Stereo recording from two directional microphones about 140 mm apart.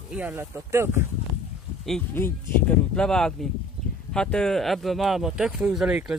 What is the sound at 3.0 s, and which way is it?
Speech, 5° left (ahead or behind).